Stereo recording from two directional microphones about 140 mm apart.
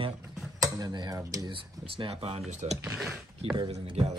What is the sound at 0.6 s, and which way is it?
Speech, 25° right (ahead or behind).